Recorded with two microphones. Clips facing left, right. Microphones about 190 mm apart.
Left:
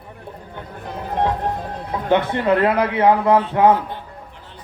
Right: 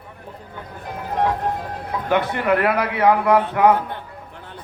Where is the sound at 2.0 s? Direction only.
25° left (ahead or behind).